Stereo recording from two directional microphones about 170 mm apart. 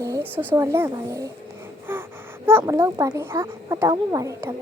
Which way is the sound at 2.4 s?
15° right (ahead or behind).